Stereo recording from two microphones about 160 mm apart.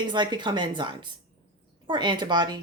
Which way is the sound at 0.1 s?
30° right (ahead or behind).